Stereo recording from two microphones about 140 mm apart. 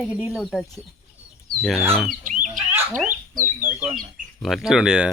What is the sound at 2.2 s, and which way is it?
Bird, 65° right (ahead or behind).